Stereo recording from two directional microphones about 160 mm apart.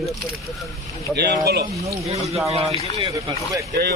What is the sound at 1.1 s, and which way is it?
Speech, 90° right.